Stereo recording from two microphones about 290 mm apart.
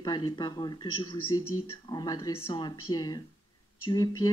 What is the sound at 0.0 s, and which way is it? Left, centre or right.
Speech, centre.